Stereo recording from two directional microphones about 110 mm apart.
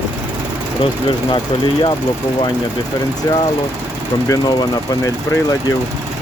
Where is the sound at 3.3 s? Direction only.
30° left (ahead or behind).